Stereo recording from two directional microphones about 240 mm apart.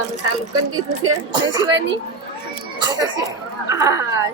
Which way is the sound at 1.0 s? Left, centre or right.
Centre.